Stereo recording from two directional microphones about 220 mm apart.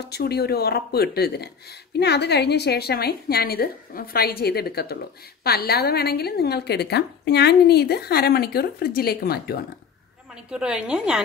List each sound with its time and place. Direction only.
0.0 s speech: 45° left (ahead or behind)
10.5 s a woman's voice: 5° right (ahead or behind)